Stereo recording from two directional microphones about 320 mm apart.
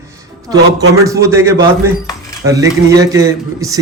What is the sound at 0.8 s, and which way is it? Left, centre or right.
Speech, centre.